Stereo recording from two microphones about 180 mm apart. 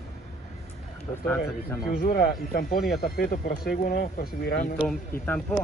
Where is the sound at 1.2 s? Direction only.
10° left (ahead or behind).